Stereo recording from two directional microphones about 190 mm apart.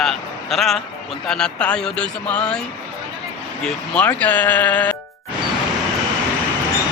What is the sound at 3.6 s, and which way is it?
Speech, 5° left (ahead or behind).